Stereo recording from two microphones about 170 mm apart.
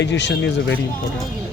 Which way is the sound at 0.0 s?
90° left.